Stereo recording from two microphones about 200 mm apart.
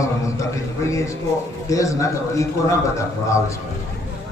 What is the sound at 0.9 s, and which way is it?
A man's voice, 15° left (ahead or behind).